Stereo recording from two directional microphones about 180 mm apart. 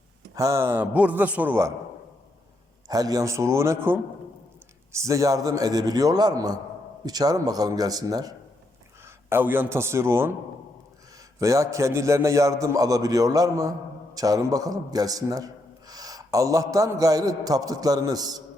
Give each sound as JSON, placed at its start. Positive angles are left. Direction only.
{"t": 0.3, "sound": "a man's voice", "side_deg": -15}
{"t": 2.8, "sound": "a man's voice", "side_deg": -20}
{"t": 11.3, "sound": "a man's voice", "side_deg": -20}